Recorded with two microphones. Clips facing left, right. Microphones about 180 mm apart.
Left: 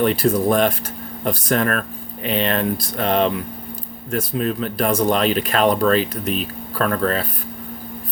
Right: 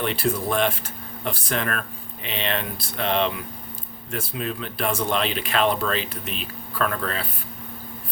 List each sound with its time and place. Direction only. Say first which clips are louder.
0.0 s speech: left 7 dB; 40° left (ahead or behind)